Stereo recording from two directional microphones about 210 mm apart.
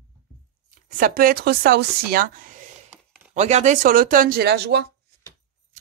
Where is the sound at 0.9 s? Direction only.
45° right (ahead or behind).